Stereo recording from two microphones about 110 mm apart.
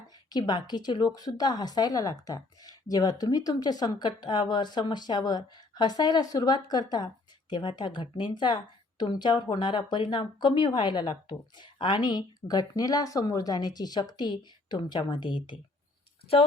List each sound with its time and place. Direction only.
0.3 s a woman's voice: 40° left (ahead or behind)